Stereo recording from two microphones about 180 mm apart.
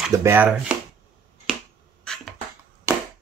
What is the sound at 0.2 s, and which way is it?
Speech, 10° right (ahead or behind).